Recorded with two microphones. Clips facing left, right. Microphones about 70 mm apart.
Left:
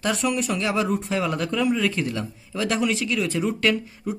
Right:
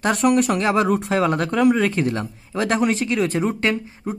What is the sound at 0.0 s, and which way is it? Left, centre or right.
Speech, right.